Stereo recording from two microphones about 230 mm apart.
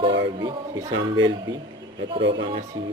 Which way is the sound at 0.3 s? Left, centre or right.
Centre.